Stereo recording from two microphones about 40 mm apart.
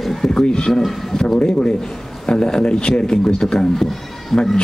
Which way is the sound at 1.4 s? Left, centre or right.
Left.